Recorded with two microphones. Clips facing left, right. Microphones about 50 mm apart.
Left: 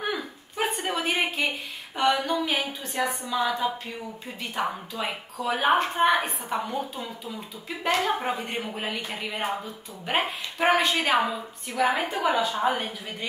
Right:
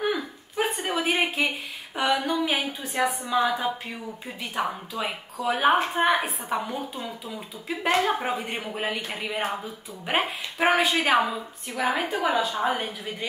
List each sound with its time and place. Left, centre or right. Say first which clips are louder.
0.0 s a sound: right 3 dB; centre
2.3 s a woman's voice: right 1 dB; centre
4.4 s a woman's voice: even; centre